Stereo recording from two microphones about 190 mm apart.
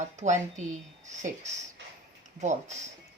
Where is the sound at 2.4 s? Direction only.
40° right (ahead or behind).